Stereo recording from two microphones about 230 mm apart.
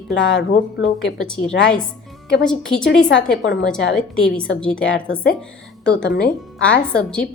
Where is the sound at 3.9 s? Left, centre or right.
Centre.